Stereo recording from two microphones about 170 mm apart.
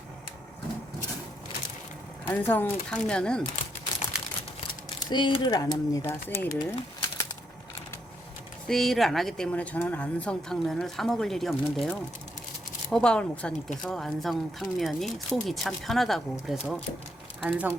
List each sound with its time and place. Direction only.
2.2 s speech: 10° left (ahead or behind)
4.9 s speech: 30° left (ahead or behind); by 6.5 s 10° left (ahead or behind)
6.6 s pigeon: 20° left (ahead or behind)
8.6 s a woman's voice: centre (ahead or behind)